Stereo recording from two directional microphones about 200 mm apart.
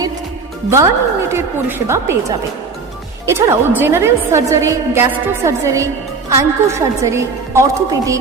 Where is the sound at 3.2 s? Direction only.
15° right (ahead or behind).